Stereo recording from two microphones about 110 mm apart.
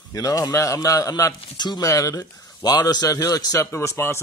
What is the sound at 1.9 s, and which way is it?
A man's voice, 30° left (ahead or behind).